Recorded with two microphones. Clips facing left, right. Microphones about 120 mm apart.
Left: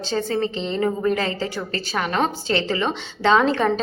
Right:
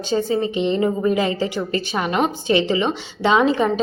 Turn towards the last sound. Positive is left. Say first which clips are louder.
# right 1 dB
turn(degrees=-10)  # may be behind; listen again after turning